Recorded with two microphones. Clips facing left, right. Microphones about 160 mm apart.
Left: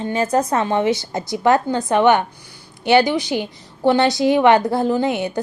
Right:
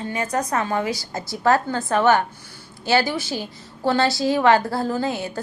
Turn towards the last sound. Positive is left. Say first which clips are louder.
# left 5 dB
turn(degrees=20)  # may be behind; listen again after turning